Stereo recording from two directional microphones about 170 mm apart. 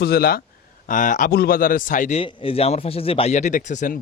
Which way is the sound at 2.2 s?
35° left (ahead or behind).